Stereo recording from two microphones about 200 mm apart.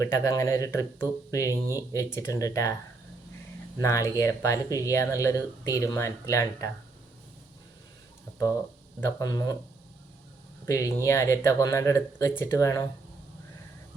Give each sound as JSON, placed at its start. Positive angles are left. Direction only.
{"t": 0.0, "sound": "speech", "side_deg": 15}
{"t": 3.8, "sound": "speech", "side_deg": 15}
{"t": 9.0, "sound": "speech", "side_deg": 15}
{"t": 10.7, "sound": "speech", "side_deg": 15}